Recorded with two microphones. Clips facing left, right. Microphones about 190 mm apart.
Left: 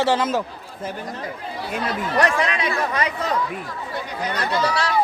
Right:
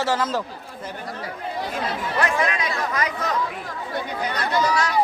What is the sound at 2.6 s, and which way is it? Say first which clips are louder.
Speech: left 2 dB; 30° left (ahead or behind).